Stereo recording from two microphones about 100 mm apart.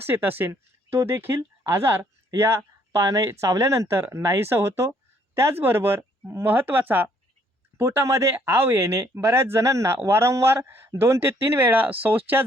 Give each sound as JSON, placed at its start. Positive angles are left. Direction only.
{"t": 0.0, "sound": "speech", "side_deg": -20}